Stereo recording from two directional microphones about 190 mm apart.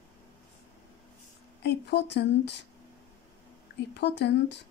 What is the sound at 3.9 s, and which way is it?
Speech, 65° left (ahead or behind).